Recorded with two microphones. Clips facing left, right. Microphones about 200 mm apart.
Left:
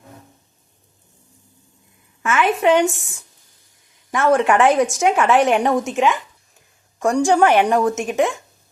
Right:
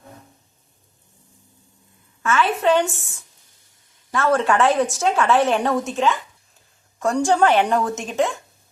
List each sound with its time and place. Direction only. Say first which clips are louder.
2.2 s a woman's voice: left 2 dB; 15° left (ahead or behind)
4.1 s a woman's voice: left 3 dB; 15° left (ahead or behind)